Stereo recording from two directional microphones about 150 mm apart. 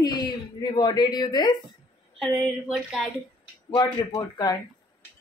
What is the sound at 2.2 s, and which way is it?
Speech, centre (ahead or behind).